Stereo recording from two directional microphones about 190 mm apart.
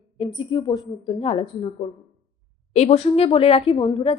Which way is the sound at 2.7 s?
35° left (ahead or behind).